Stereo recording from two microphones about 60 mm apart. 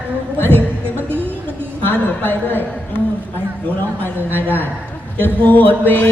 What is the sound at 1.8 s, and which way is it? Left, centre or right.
Speech, left.